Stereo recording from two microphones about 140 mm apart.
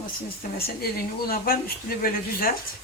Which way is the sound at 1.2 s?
90° left.